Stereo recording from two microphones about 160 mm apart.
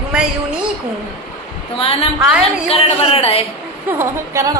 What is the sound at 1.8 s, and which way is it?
A woman's voice, 35° left (ahead or behind).